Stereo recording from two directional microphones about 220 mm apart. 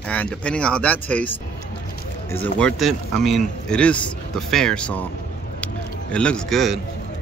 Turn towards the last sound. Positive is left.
turn(degrees=0)  # may be behind; listen again after turning